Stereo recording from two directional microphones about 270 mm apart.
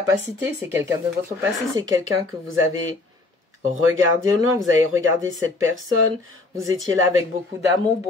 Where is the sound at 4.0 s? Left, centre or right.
Right.